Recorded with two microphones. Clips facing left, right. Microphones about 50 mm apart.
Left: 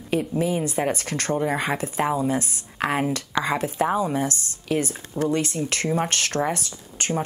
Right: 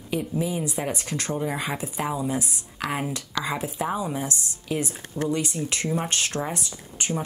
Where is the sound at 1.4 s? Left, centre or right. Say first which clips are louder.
Left 4 dB; left.